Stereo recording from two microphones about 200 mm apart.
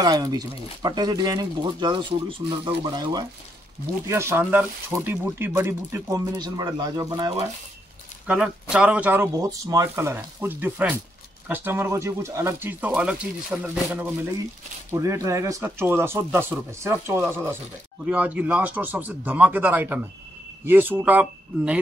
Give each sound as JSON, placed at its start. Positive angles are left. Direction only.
{"t": 0.0, "sound": "speech", "side_deg": -20}
{"t": 8.3, "sound": "speech", "side_deg": -5}
{"t": 14.9, "sound": "speech", "side_deg": -15}